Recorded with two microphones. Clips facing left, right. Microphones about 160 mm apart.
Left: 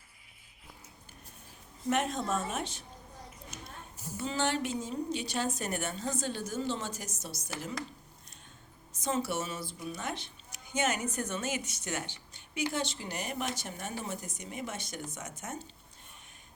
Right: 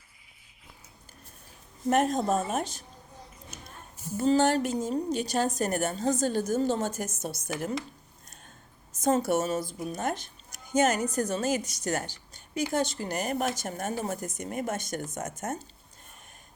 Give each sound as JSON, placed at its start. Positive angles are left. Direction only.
{"t": 1.9, "sound": "a woman's voice", "side_deg": -40}
{"t": 3.5, "sound": "a sound", "side_deg": -45}
{"t": 4.2, "sound": "speech", "side_deg": -40}
{"t": 8.9, "sound": "speech", "side_deg": -45}